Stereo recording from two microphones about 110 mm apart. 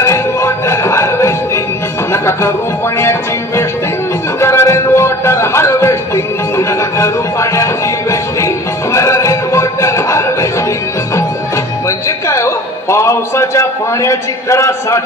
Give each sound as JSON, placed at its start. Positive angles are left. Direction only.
{"t": 0.0, "sound": "music", "side_deg": 25}
{"t": 3.0, "sound": "music", "side_deg": 25}
{"t": 12.3, "sound": "a man's voice", "side_deg": 25}